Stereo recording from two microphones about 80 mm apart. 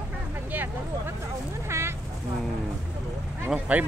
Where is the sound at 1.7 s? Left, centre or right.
Right.